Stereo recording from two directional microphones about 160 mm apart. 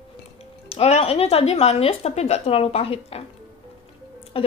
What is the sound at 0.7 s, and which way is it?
Speech, 40° left (ahead or behind).